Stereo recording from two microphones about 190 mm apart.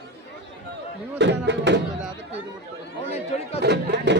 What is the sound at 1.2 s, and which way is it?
Speech, 70° right (ahead or behind).